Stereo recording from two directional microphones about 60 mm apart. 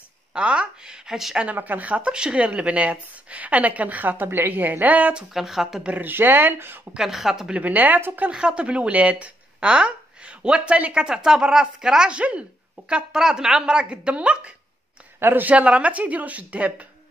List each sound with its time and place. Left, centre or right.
0.3 s speech: centre
1.4 s speech: right
5.3 s speech: centre
5.9 s speech: right
6.9 s speech: centre
7.5 s speech: right
8.3 s speech: centre
15.1 s speech: right